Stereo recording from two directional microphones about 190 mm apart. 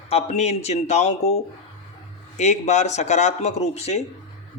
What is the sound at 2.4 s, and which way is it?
Speech, 35° left (ahead or behind).